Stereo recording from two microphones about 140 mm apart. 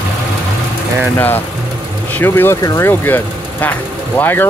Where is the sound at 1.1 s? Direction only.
15° left (ahead or behind).